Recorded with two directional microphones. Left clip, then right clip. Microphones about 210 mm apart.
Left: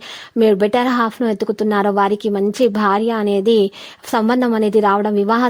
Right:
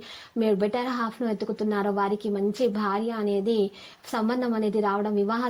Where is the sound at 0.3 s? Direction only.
45° left (ahead or behind).